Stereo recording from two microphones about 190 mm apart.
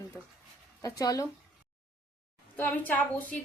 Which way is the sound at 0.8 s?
20° left (ahead or behind).